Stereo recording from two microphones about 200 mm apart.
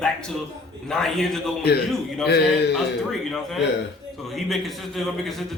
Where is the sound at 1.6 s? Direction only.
55° left (ahead or behind).